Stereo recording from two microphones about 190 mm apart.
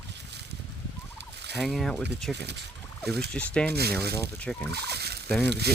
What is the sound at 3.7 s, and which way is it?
Speech, 55° right (ahead or behind).